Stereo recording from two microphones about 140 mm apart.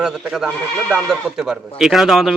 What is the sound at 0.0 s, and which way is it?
Speech, 5° right (ahead or behind).